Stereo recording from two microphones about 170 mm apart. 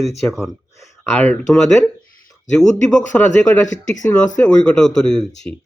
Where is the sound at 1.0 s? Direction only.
10° left (ahead or behind).